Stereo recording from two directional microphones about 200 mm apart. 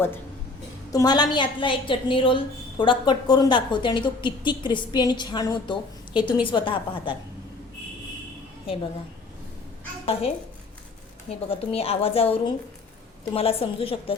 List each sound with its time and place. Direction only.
0.9 s a woman's voice: 20° left (ahead or behind)
10.1 s a woman's voice: 30° left (ahead or behind)